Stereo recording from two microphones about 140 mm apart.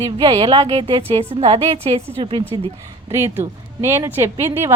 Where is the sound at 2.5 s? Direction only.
30° right (ahead or behind).